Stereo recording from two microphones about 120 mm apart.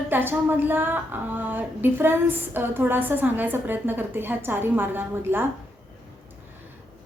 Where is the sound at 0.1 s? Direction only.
20° right (ahead or behind).